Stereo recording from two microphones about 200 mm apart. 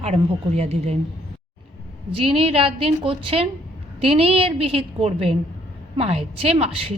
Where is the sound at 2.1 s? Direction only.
30° right (ahead or behind).